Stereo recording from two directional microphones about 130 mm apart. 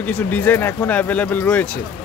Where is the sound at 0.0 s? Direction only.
10° left (ahead or behind).